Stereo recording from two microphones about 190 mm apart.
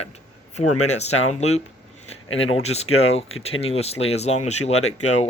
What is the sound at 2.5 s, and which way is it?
Speech, 35° left (ahead or behind).